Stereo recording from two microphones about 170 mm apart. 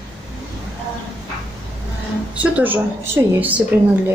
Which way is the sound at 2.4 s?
10° right (ahead or behind).